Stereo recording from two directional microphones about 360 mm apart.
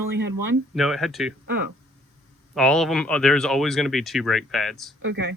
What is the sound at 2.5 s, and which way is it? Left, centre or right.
Speech, centre.